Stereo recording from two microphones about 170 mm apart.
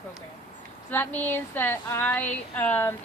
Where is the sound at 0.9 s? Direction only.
10° left (ahead or behind).